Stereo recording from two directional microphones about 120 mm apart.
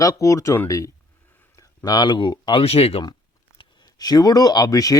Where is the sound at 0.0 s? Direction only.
30° left (ahead or behind); by 3.0 s 55° left (ahead or behind).